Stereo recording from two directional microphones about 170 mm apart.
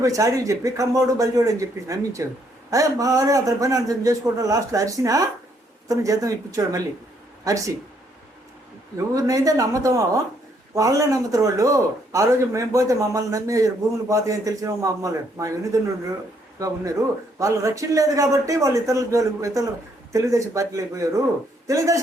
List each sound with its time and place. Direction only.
0.0 s a man's voice: 20° right (ahead or behind)
9.1 s a man's voice: 20° right (ahead or behind)